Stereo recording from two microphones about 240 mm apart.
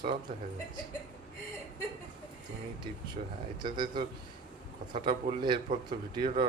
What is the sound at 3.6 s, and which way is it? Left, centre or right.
Speech, centre.